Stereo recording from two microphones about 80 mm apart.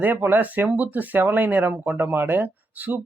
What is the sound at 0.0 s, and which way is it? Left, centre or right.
Speech, right.